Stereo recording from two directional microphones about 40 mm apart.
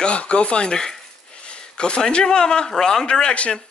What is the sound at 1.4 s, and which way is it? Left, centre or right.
A man's voice, left.